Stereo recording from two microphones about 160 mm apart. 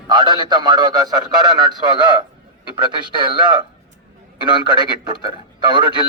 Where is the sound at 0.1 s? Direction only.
25° right (ahead or behind).